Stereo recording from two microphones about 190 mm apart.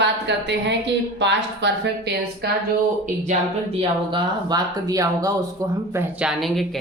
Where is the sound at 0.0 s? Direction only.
65° right (ahead or behind).